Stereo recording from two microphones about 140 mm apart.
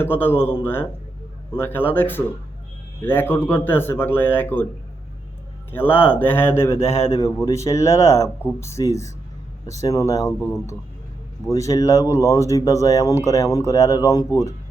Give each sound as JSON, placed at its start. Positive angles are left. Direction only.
{"t": 0.0, "sound": "speech", "side_deg": 15}
{"t": 5.7, "sound": "speech", "side_deg": 15}